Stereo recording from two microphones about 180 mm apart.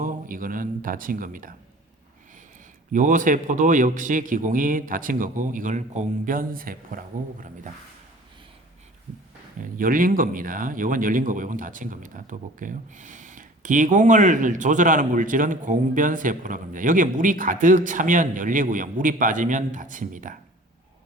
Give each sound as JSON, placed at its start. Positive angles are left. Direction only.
{"t": 0.0, "sound": "speech", "side_deg": -50}
{"t": 2.9, "sound": "speech", "side_deg": -45}
{"t": 9.6, "sound": "speech", "side_deg": -50}